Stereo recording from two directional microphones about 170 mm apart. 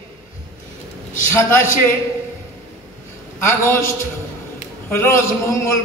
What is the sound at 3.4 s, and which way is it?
A man's voice, 15° left (ahead or behind).